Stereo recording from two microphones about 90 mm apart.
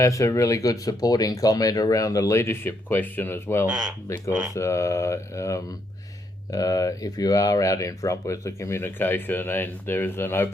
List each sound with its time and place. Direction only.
0.0 s speech: 35° left (ahead or behind)